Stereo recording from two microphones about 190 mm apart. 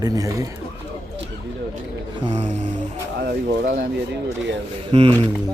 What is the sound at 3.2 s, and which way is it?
Speech, 50° right (ahead or behind).